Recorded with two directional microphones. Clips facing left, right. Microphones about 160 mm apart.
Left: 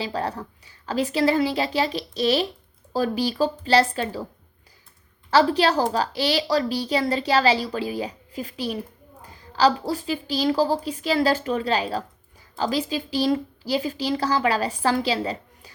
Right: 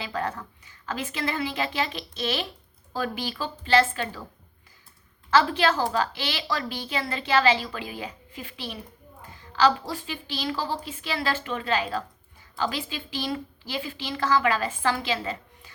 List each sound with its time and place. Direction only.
0.0 s a woman's voice: 35° left (ahead or behind)
5.3 s a woman's voice: 35° left (ahead or behind)